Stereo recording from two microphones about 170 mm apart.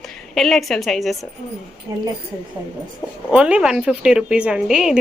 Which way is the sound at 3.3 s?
5° right (ahead or behind).